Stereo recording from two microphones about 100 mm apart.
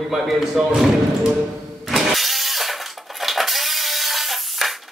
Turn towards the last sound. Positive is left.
turn(degrees=0)  # may be behind; listen again after turning